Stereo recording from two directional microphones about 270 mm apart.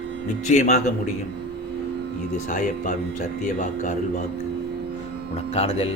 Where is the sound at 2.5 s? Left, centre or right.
Left.